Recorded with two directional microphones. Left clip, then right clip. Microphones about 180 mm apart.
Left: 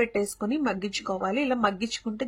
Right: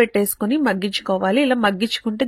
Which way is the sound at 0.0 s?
40° right (ahead or behind).